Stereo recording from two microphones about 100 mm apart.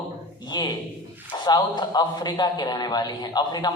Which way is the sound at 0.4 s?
45° left (ahead or behind).